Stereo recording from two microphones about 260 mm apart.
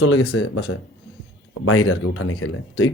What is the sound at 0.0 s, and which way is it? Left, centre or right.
Speech, left.